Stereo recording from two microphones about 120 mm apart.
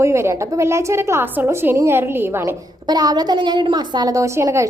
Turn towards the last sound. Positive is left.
turn(degrees=-25)  # may be behind; listen again after turning